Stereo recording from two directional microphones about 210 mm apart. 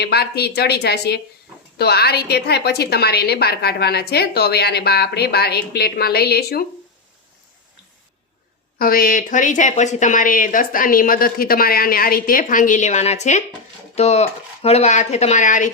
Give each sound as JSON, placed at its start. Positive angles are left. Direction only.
{"t": 0.0, "sound": "a woman's voice", "side_deg": 50}
{"t": 8.8, "sound": "speech", "side_deg": 45}